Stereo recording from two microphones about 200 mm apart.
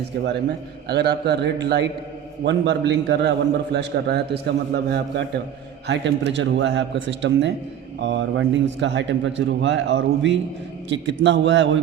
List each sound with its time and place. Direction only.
0.0 s a man's voice: 55° right (ahead or behind)